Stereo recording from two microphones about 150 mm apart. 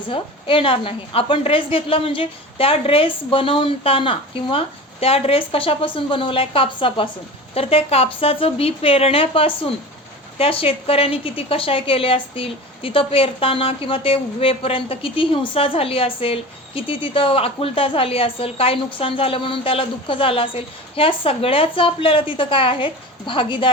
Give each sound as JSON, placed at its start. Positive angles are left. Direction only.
{"t": 0.1, "sound": "a woman's voice", "side_deg": 35}